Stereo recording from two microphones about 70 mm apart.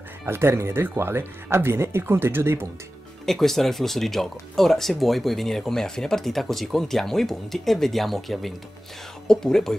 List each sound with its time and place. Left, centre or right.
0.2 s speech: right
3.3 s speech: centre